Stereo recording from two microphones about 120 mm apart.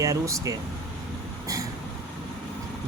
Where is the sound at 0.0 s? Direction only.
25° right (ahead or behind).